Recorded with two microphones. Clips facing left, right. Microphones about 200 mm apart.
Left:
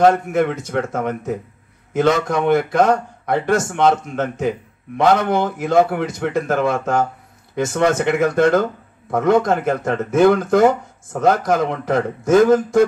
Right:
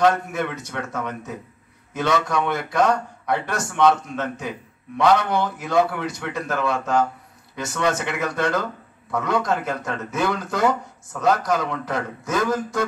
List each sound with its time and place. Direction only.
0.0 s a man's voice: 50° left (ahead or behind)